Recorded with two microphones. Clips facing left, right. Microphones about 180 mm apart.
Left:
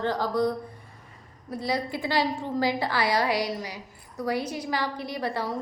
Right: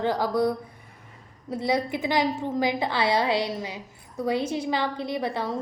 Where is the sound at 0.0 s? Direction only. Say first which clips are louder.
Right 2 dB; 10° right (ahead or behind).